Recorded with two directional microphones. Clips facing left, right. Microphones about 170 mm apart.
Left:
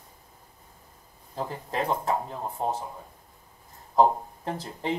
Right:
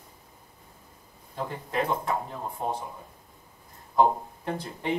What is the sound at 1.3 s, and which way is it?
Speech, 35° left (ahead or behind).